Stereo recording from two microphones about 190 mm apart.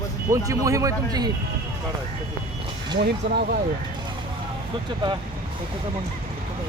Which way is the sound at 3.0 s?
55° right (ahead or behind).